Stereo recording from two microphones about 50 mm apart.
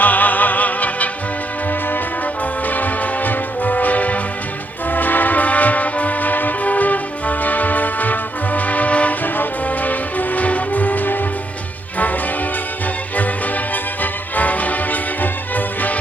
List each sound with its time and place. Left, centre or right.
0.0 s music: left
2.6 s music: left
14.0 s music: left